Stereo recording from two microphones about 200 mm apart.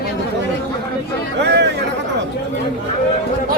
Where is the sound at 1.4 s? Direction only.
55° right (ahead or behind).